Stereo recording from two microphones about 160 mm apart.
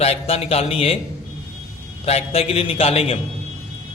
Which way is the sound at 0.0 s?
40° left (ahead or behind).